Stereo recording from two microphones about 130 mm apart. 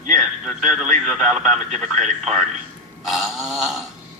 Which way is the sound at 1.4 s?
60° right (ahead or behind).